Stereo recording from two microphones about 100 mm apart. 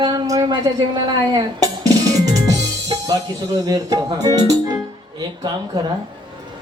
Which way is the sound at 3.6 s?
35° right (ahead or behind).